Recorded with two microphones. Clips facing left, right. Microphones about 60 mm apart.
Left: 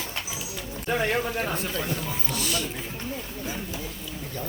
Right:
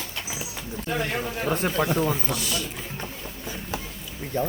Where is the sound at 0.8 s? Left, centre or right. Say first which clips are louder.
Left 2 dB; centre.